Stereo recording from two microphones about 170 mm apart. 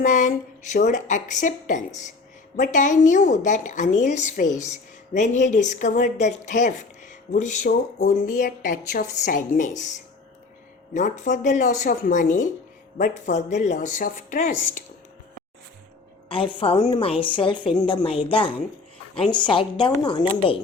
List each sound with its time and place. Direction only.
0.0 s a woman's voice: 50° left (ahead or behind)
7.7 s a woman's voice: 60° left (ahead or behind)
10.9 s a woman's voice: 45° left (ahead or behind)
16.3 s a woman's voice: 30° left (ahead or behind)